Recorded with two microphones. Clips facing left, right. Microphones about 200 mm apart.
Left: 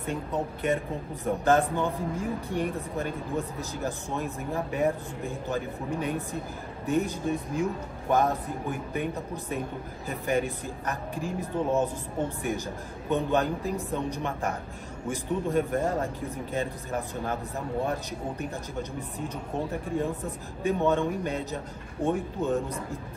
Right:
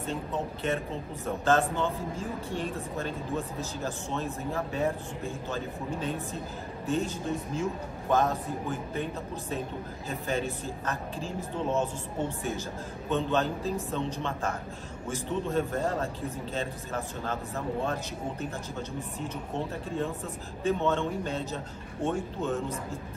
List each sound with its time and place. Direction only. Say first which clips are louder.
0.0 s speech: left 2 dB; 15° left (ahead or behind)
18.4 s speech: left 2 dB; 15° left (ahead or behind)
20.6 s speech: left 2 dB; 15° left (ahead or behind)